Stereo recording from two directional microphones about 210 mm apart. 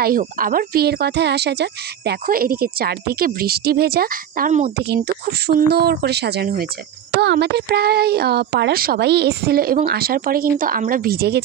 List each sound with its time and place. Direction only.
0.0 s speech: 40° right (ahead or behind)